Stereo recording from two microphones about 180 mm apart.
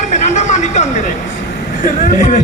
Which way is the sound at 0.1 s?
40° left (ahead or behind).